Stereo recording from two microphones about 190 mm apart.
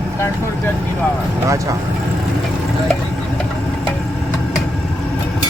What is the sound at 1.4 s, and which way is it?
Speech, 15° right (ahead or behind).